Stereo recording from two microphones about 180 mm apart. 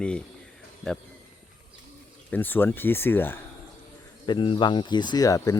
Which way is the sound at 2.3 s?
10° left (ahead or behind).